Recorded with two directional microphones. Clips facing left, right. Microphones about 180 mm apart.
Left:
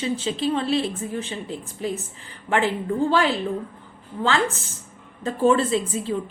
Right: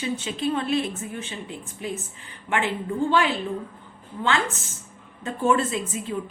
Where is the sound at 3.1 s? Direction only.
35° left (ahead or behind).